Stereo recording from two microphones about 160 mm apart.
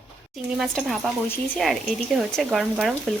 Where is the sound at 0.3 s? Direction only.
Centre (ahead or behind).